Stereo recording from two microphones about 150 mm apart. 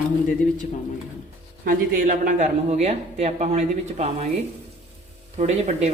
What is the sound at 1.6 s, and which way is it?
Speech, 65° right (ahead or behind).